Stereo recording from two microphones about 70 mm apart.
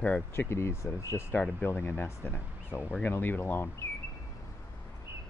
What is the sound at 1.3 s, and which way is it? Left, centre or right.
Speech, left.